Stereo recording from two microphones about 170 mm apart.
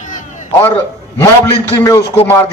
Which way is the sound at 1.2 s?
15° left (ahead or behind).